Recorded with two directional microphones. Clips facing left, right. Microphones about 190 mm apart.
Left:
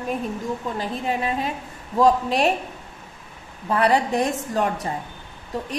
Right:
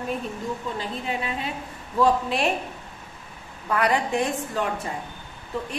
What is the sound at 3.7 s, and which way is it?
A woman's voice, 30° left (ahead or behind).